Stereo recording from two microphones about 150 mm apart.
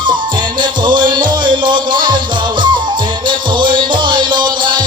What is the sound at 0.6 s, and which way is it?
Music, 30° right (ahead or behind).